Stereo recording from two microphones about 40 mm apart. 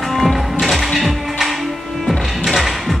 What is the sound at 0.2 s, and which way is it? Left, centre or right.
Music, centre.